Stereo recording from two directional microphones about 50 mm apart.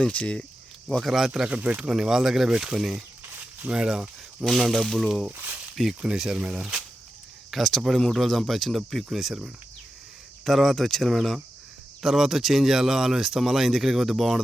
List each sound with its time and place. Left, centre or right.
0.1 s speech: left
0.9 s speech: centre
1.1 s speech: centre
1.5 s speech: right
1.9 s speech: centre
4.4 s speech: centre
5.4 s speech: right
5.9 s speech: centre
7.5 s speech: centre
10.4 s speech: centre
12.0 s speech: centre